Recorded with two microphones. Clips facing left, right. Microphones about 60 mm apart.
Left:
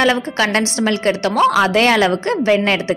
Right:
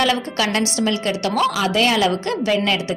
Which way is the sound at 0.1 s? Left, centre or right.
Left.